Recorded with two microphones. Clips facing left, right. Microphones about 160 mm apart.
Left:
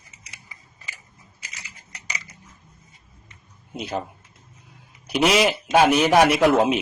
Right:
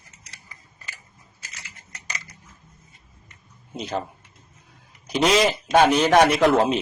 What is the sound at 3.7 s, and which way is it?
A man's voice, 10° left (ahead or behind).